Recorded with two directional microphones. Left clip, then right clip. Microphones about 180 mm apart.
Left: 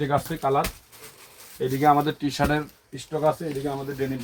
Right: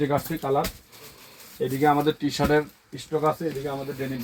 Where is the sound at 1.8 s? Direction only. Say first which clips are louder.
Left 1 dB; 5° left (ahead or behind).